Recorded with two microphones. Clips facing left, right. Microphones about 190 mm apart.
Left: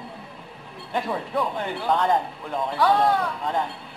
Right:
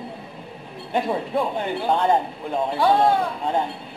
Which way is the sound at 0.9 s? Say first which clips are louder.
Right 3 dB; 25° right (ahead or behind).